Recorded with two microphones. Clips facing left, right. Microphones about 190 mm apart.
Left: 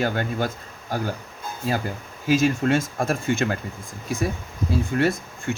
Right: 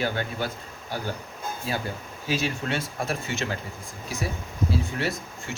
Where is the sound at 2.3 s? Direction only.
45° left (ahead or behind).